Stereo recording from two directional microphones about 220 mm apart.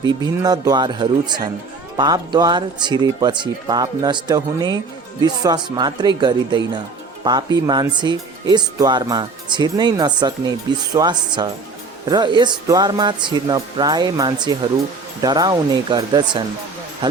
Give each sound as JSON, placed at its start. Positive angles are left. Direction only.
{"t": 0.0, "sound": "speech", "side_deg": -20}